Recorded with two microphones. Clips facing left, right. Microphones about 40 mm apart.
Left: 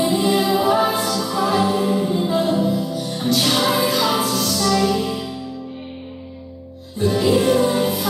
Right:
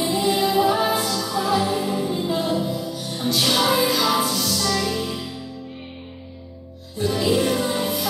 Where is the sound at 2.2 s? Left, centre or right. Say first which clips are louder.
Left 4 dB; left.